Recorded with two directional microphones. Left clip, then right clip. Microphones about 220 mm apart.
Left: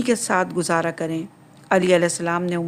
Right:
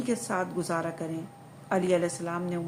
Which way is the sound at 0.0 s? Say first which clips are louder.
Left 10 dB; 40° left (ahead or behind).